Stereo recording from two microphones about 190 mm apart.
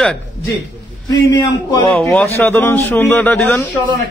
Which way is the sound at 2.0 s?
5° left (ahead or behind).